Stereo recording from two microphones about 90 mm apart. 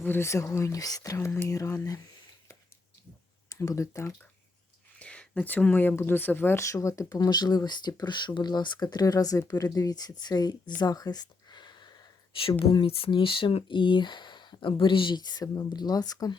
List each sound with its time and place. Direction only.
0.0 s speech: 25° left (ahead or behind)
3.5 s speech: 35° left (ahead or behind)
4.9 s speech: 15° left (ahead or behind); by 10.5 s 50° left (ahead or behind)
10.8 s a sound: 50° left (ahead or behind)
12.3 s speech: 90° left; by 16.4 s 45° left (ahead or behind)